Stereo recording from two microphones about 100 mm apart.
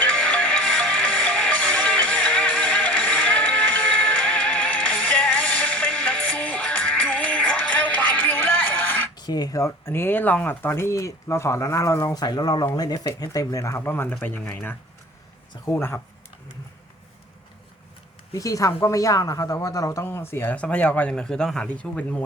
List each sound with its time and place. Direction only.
0.0 s music: 10° left (ahead or behind)
9.1 s speech: 45° left (ahead or behind); by 16.0 s 25° left (ahead or behind)
18.3 s speech: 35° left (ahead or behind); by 22.2 s 10° left (ahead or behind)